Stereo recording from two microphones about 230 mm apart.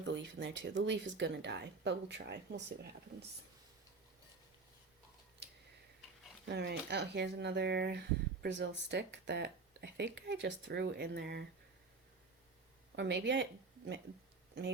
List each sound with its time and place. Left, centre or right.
0.0 s speech: right
6.5 s speech: right
13.0 s speech: right